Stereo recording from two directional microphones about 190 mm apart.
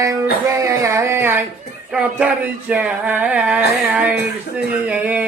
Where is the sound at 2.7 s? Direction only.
5° right (ahead or behind).